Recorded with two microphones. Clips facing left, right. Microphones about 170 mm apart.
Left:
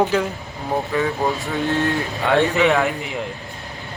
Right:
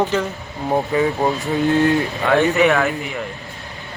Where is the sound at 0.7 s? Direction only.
20° right (ahead or behind).